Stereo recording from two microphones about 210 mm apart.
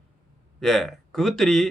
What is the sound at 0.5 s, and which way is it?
Speech, centre (ahead or behind).